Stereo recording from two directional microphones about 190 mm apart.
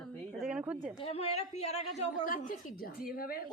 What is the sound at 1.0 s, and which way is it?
A woman's voice, 30° left (ahead or behind).